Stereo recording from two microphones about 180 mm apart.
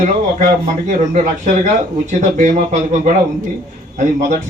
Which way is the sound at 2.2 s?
45° right (ahead or behind).